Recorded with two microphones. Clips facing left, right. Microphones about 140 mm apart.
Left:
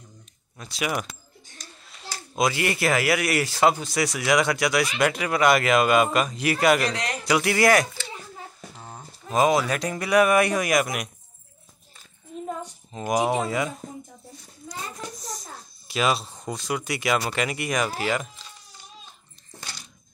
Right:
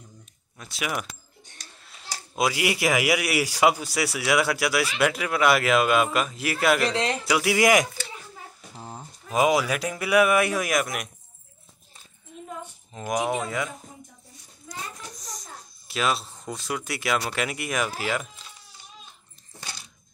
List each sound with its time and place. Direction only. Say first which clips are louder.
0.6 s speech: left 3 dB; centre (ahead or behind)
2.3 s a man's voice: left 1 dB; 10° right (ahead or behind)
6.9 s speech: right 4 dB; 25° right (ahead or behind)
7.2 s speech: left 3 dB; 5° right (ahead or behind)
7.5 s a man's voice: right 1 dB; 15° right (ahead or behind); by 11.1 s centre (ahead or behind)
13.2 s speech: left 3 dB; 30° left (ahead or behind)
15.9 s speech: left 2 dB; centre (ahead or behind)